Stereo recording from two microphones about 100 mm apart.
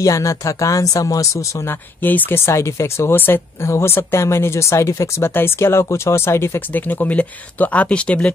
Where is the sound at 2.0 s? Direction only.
20° left (ahead or behind).